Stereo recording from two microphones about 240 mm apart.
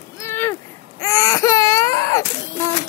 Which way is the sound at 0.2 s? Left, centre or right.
Centre.